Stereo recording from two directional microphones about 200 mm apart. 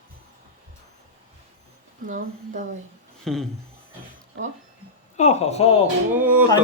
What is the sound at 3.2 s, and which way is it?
Speech, centre (ahead or behind).